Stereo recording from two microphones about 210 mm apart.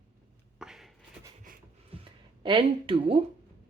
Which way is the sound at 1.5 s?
40° right (ahead or behind).